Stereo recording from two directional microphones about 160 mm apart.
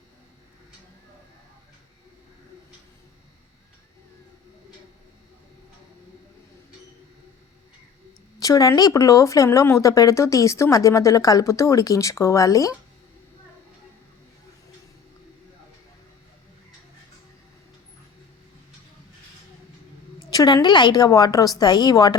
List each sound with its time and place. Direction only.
8.4 s speech: 20° left (ahead or behind)
20.3 s speech: 25° left (ahead or behind)